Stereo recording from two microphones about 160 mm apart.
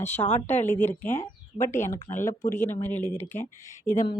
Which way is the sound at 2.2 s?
15° left (ahead or behind).